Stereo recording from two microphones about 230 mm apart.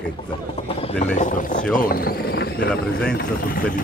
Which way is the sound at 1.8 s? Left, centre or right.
Left.